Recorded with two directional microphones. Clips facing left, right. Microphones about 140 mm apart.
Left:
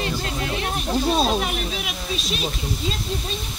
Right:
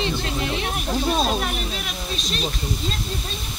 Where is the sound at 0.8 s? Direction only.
Centre (ahead or behind).